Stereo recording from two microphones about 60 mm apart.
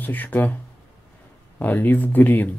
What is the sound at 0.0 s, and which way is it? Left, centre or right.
Speech, left.